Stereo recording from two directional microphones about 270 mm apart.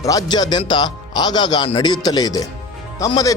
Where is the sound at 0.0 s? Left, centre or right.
Centre.